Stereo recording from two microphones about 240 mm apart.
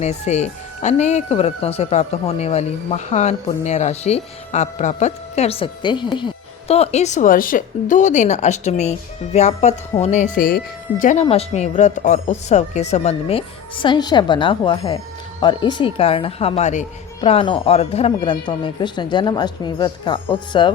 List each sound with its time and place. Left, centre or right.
0.0 s speech: left